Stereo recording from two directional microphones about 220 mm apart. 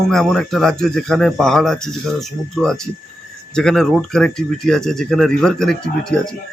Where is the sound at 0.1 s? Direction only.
Centre (ahead or behind).